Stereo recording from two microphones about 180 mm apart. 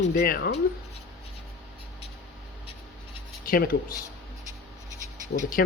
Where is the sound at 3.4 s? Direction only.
55° left (ahead or behind).